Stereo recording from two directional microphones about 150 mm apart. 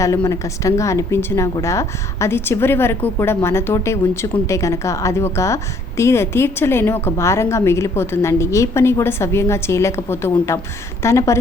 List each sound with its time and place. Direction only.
0.0 s a woman's voice: 20° left (ahead or behind)